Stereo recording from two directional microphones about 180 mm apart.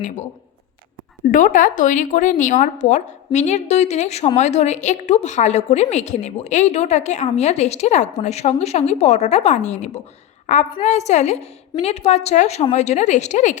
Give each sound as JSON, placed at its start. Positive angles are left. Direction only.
{"t": 1.3, "sound": "a woman's voice", "side_deg": 45}